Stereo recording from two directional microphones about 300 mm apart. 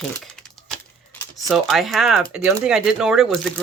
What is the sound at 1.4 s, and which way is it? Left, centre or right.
Speech, centre.